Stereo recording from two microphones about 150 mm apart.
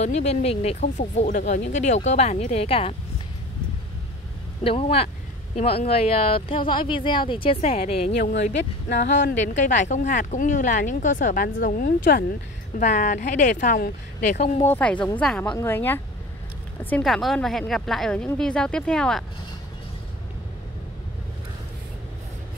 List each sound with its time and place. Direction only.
0.0 s speech: 45° left (ahead or behind)
4.6 s speech: 40° left (ahead or behind)
9.1 s speech: 55° left (ahead or behind); by 12.3 s 80° left
12.7 s speech: 55° left (ahead or behind)
14.6 s a woman's voice: 10° left (ahead or behind)